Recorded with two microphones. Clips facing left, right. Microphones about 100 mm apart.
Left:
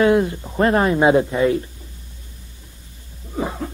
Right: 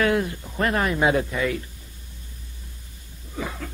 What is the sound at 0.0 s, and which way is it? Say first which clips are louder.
Speech: left 6 dB; 25° left (ahead or behind).